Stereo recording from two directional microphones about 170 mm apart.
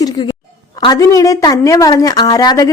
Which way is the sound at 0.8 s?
20° left (ahead or behind).